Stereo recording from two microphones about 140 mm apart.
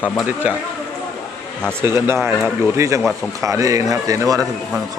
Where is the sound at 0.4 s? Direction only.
10° right (ahead or behind).